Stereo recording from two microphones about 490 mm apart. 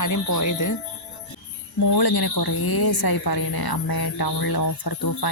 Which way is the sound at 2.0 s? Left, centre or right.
Left.